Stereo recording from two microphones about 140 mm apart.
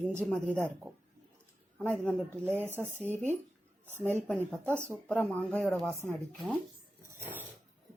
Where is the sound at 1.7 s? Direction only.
10° left (ahead or behind).